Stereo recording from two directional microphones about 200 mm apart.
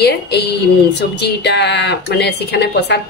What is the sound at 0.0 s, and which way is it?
Speech, 55° left (ahead or behind).